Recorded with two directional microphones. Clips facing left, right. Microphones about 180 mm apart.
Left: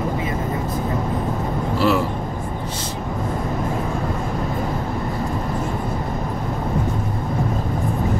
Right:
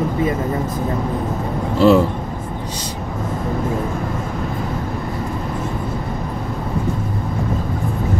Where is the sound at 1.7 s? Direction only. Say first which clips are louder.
Right 7 dB; 25° right (ahead or behind).